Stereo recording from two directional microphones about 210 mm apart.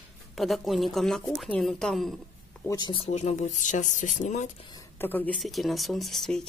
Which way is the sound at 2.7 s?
20° left (ahead or behind).